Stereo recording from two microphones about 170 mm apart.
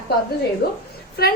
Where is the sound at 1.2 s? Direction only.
65° left (ahead or behind).